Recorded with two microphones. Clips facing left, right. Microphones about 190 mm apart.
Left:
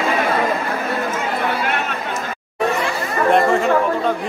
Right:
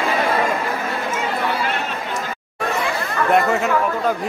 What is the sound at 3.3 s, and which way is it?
Chatter, 5° right (ahead or behind).